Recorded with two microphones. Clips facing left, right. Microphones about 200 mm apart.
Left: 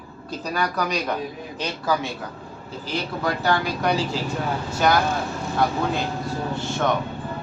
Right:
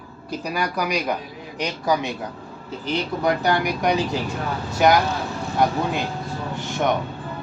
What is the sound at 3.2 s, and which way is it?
Speech, 15° right (ahead or behind).